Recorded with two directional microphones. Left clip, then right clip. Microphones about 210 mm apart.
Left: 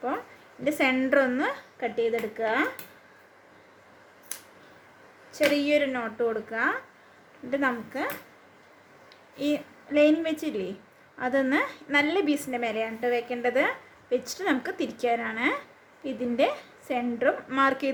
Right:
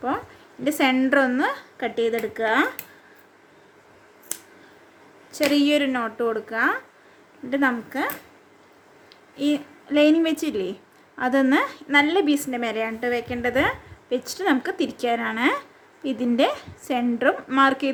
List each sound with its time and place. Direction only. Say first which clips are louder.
0.6 s a woman's voice: right 4 dB; 15° right (ahead or behind)
5.5 s a woman's voice: right 4 dB; 20° right (ahead or behind)
9.3 s a woman's voice: right 4 dB; 15° right (ahead or behind)